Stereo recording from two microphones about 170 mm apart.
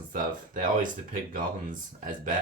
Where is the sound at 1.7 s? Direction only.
55° right (ahead or behind).